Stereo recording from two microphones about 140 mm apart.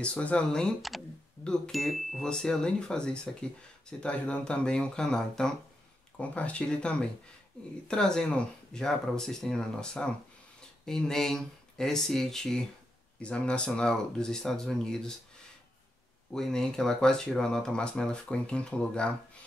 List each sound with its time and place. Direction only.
0.0 s speech: 10° left (ahead or behind)